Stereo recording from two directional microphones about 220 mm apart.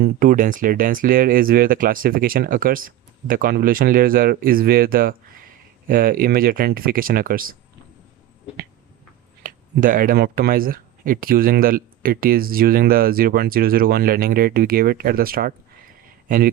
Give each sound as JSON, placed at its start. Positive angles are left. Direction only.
{"t": 0.0, "sound": "speech", "side_deg": -40}
{"t": 9.4, "sound": "speech", "side_deg": -40}